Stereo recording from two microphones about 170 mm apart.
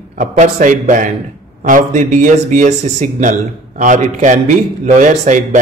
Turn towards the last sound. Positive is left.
turn(degrees=-45)  # may be behind; listen again after turning